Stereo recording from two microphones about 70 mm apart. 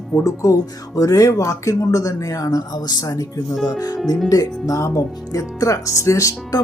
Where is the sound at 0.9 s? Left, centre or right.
Left.